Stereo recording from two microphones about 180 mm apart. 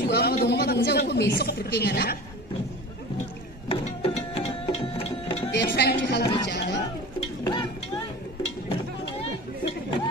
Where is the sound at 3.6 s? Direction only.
30° left (ahead or behind).